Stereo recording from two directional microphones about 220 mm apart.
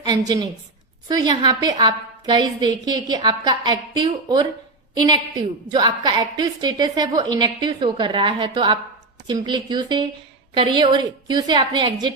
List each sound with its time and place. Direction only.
0.0 s a woman's voice: 20° right (ahead or behind)